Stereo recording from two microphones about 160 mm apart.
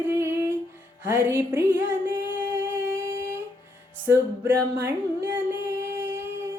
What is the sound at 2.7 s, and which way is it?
Humming, 15° right (ahead or behind).